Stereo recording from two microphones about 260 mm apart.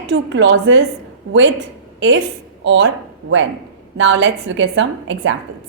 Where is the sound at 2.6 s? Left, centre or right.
Right.